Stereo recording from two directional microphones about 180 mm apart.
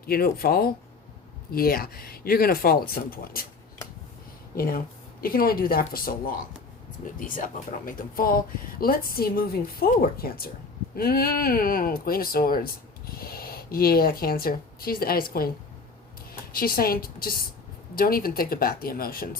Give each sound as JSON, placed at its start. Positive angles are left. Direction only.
{"t": 0.0, "sound": "speech", "side_deg": 55}
{"t": 4.5, "sound": "a woman's voice", "side_deg": 55}